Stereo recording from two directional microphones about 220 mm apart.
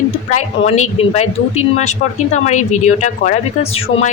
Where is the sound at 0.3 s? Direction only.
30° left (ahead or behind).